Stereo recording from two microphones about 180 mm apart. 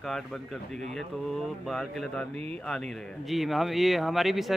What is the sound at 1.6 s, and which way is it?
A man's voice, centre (ahead or behind).